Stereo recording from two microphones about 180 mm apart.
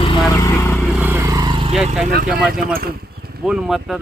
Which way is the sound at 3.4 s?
5° right (ahead or behind).